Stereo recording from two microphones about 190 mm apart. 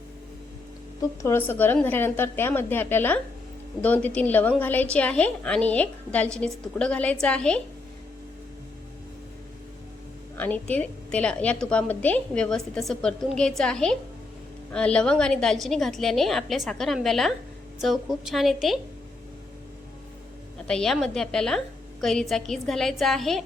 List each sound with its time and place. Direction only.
1.2 s a woman's voice: 10° left (ahead or behind)
10.3 s a woman's voice: 10° left (ahead or behind)
20.7 s a woman's voice: 5° left (ahead or behind)